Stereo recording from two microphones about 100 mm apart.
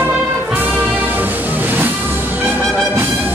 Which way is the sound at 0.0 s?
20° right (ahead or behind).